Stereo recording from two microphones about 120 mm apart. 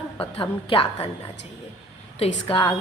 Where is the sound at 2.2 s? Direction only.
50° left (ahead or behind).